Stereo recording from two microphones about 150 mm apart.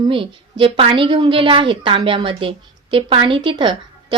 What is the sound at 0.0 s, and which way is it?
A woman's voice, 35° right (ahead or behind).